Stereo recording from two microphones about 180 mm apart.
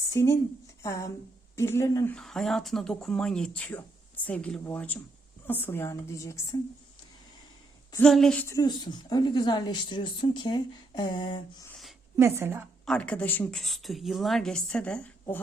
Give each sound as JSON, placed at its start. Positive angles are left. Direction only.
{"t": 0.1, "sound": "a woman's voice", "side_deg": 15}
{"t": 2.1, "sound": "a woman's voice", "side_deg": 0}
{"t": 8.0, "sound": "a woman's voice", "side_deg": 5}
{"t": 12.1, "sound": "a woman's voice", "side_deg": -15}
{"t": 12.8, "sound": "a woman's voice", "side_deg": 5}